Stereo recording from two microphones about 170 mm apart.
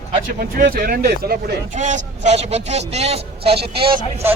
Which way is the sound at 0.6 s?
60° right (ahead or behind).